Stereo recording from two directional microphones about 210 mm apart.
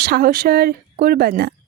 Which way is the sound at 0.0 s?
45° right (ahead or behind).